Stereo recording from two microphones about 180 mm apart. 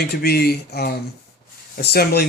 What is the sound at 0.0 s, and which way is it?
Speech, 60° left (ahead or behind).